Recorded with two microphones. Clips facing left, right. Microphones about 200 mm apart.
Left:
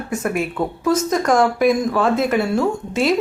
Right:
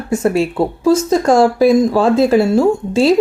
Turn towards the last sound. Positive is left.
turn(degrees=-30)  # may be behind; listen again after turning